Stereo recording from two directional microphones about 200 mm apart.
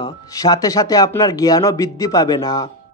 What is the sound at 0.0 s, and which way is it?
Speech, 20° left (ahead or behind).